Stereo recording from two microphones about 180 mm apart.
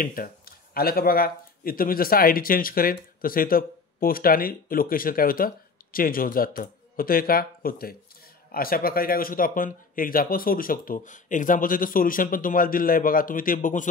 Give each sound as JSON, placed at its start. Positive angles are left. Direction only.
{"t": 0.0, "sound": "speech", "side_deg": 50}